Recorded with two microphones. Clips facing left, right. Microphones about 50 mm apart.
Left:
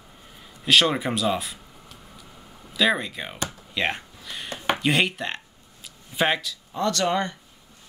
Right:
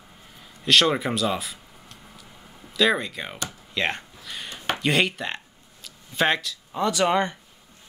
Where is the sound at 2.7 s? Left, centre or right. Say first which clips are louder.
Right 1 dB; centre.